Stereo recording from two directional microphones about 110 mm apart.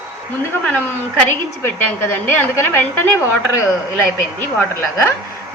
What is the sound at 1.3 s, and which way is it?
A woman's voice, 20° left (ahead or behind).